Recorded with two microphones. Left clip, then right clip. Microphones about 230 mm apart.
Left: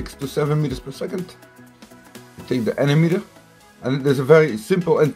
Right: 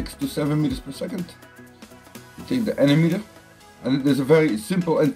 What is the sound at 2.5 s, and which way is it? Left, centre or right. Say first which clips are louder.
Speech: even; left.